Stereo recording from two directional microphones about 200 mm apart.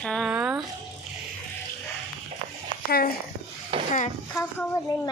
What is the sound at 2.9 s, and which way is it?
Speech, 50° left (ahead or behind).